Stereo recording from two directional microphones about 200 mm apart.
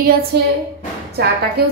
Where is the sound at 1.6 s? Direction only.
50° right (ahead or behind).